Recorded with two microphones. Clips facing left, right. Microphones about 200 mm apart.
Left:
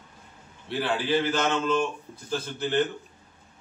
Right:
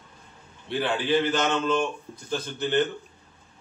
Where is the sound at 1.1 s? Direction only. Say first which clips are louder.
Right 2 dB; 5° left (ahead or behind).